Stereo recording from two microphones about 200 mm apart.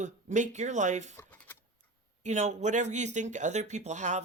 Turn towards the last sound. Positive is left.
turn(degrees=-35)  # may be behind; listen again after turning